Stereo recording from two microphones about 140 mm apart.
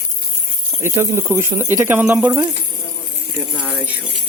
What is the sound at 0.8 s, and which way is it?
Speech, 20° right (ahead or behind).